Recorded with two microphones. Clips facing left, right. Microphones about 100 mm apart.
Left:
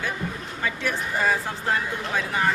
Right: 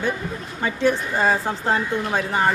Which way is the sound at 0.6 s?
30° right (ahead or behind).